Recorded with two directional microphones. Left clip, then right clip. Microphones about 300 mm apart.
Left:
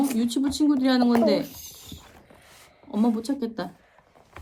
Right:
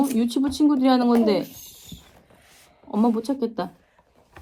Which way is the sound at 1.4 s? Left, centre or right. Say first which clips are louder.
Even; left.